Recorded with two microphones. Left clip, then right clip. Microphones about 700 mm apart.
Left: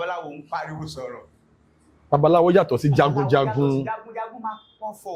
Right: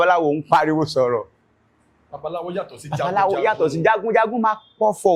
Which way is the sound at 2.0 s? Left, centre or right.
Left.